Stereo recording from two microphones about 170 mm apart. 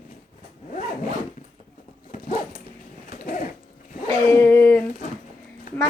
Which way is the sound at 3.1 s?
55° left (ahead or behind).